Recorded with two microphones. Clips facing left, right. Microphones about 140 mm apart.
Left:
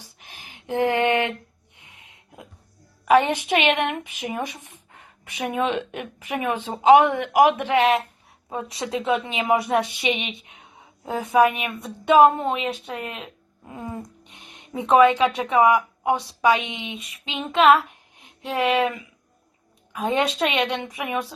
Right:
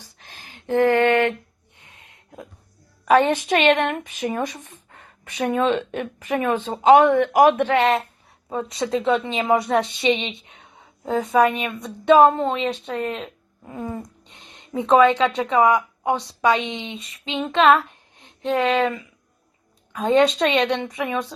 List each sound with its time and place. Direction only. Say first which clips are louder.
0.0 s a sound: even; 15° left (ahead or behind)
3.1 s a woman's voice: right 1 dB; 15° left (ahead or behind)
7.8 s a woman's voice: even; centre (ahead or behind)
16.6 s female singing: right 3 dB; 10° left (ahead or behind)
19.9 s a woman's voice: right 6 dB; 10° left (ahead or behind)